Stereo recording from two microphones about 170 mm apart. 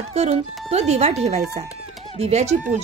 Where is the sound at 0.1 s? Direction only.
40° right (ahead or behind).